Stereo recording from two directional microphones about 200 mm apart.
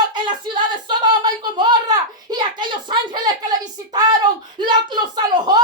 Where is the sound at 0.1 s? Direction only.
25° right (ahead or behind).